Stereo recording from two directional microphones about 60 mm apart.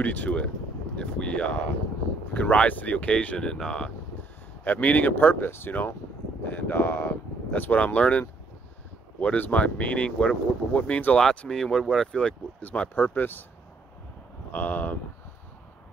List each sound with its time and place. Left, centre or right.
0.0 s speech: left
4.6 s speech: left
11.1 s speech: centre
12.9 s speech: left
14.5 s speech: left